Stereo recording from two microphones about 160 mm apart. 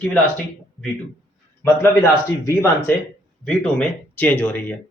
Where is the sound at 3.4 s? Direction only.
5° left (ahead or behind).